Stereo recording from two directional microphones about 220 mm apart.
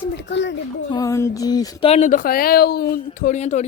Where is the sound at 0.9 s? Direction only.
15° left (ahead or behind).